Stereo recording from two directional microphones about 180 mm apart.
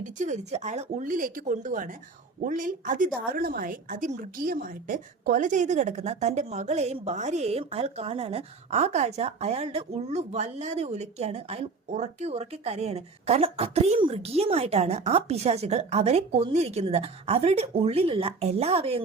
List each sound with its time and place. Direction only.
0.0 s a woman's voice: 45° right (ahead or behind)